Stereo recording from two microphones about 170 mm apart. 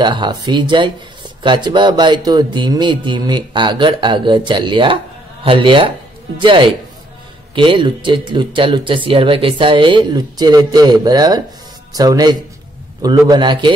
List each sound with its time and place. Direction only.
0.0 s speech: 25° right (ahead or behind)